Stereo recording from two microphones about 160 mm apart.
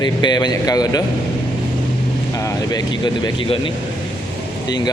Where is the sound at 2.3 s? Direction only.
20° left (ahead or behind).